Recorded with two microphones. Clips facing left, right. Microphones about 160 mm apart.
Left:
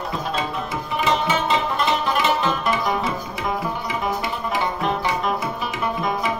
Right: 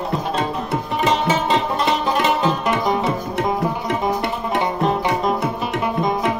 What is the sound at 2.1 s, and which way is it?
Music, 25° right (ahead or behind).